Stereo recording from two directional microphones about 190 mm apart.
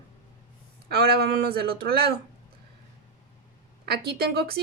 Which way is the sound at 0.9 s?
55° right (ahead or behind).